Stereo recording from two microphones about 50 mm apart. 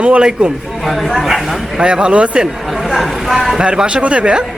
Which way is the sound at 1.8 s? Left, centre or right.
Centre.